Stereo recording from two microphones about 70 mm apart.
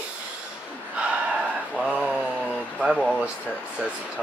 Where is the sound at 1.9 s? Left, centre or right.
Centre.